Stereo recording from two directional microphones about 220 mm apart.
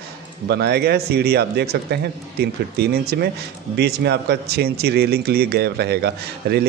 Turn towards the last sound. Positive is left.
turn(degrees=-45)  # may be behind; listen again after turning